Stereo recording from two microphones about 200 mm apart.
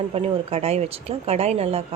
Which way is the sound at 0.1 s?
30° right (ahead or behind).